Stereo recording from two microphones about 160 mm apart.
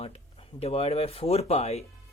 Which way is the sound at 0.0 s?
40° left (ahead or behind).